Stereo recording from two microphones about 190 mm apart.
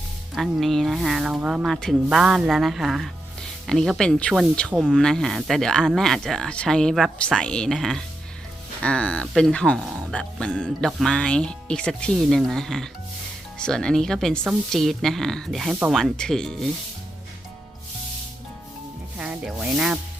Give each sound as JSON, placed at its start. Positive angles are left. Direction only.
{"t": 0.3, "sound": "speech", "side_deg": 0}
{"t": 19.1, "sound": "rub", "side_deg": -5}